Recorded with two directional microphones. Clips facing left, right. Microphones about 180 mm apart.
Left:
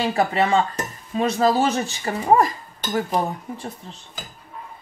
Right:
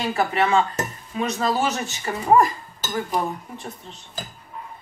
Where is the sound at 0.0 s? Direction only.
35° left (ahead or behind).